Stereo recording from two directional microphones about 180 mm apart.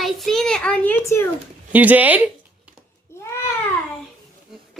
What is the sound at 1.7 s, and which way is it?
Speech, 10° right (ahead or behind).